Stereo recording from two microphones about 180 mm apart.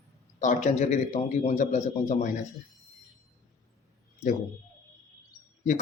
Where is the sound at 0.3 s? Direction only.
40° left (ahead or behind).